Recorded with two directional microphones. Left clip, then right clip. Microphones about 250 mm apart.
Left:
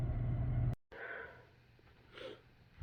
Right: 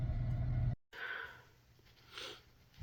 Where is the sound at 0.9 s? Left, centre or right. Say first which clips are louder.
Right 4 dB; centre.